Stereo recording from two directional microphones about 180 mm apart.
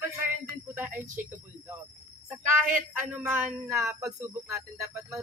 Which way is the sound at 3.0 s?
10° right (ahead or behind).